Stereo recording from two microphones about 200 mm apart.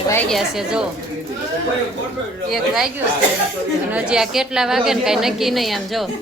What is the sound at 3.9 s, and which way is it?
A woman's voice, 5° right (ahead or behind).